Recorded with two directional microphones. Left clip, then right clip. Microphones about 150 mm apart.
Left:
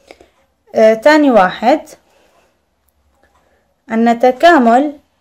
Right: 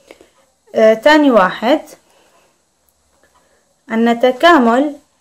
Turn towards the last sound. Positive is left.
turn(degrees=20)  # may be behind; listen again after turning